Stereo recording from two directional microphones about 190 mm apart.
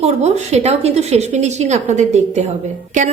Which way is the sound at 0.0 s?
35° right (ahead or behind).